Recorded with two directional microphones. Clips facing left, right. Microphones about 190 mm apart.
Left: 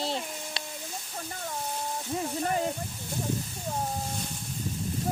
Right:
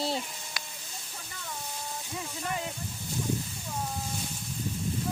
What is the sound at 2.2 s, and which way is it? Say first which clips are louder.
Speech: left 6 dB; 40° left (ahead or behind).